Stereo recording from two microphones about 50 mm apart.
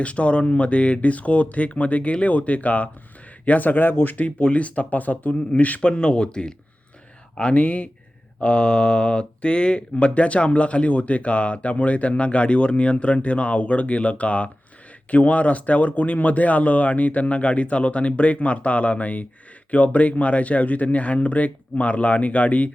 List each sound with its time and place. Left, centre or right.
0.0 s speech: left
5.8 s speech: centre